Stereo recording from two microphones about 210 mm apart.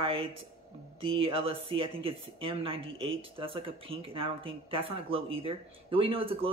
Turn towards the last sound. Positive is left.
turn(degrees=-25)  # may be behind; listen again after turning